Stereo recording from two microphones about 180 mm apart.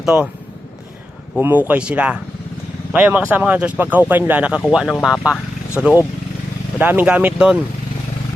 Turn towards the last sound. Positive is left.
turn(degrees=-5)  # may be behind; listen again after turning